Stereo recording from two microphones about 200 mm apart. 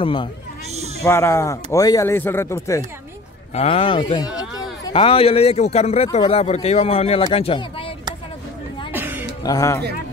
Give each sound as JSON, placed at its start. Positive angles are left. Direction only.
{"t": 0.0, "sound": "a man's voice", "side_deg": 25}
{"t": 1.0, "sound": "a man's voice", "side_deg": 15}
{"t": 3.5, "sound": "a man's voice", "side_deg": 30}
{"t": 8.9, "sound": "a sound", "side_deg": -10}
{"t": 9.4, "sound": "speech", "side_deg": 15}